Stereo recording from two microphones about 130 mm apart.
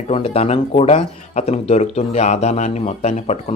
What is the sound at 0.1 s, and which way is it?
Speech, 50° left (ahead or behind).